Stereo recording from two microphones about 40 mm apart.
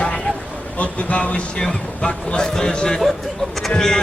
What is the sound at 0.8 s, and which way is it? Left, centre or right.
Speech, left.